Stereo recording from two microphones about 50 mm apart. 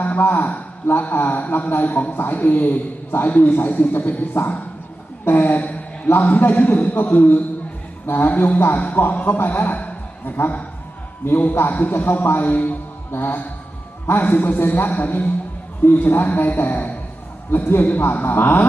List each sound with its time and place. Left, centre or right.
0.0 s a man's voice: left
8.0 s a man's voice: left
11.3 s a man's voice: left
13.1 s music: left
14.1 s a man's voice: left
17.5 s a man's voice: left